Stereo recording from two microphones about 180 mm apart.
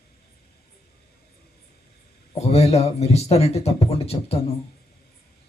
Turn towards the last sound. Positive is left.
turn(degrees=35)  # may be behind; listen again after turning